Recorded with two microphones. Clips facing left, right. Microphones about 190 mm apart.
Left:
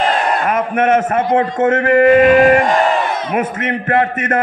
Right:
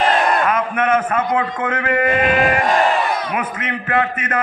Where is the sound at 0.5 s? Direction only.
45° left (ahead or behind).